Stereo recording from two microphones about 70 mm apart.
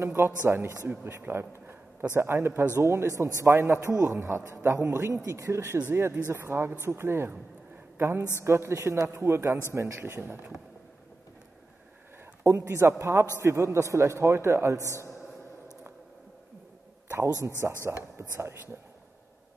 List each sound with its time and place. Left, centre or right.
0.0 s a man's voice: right
8.5 s a man's voice: right
12.4 s a man's voice: right
17.6 s a man's voice: right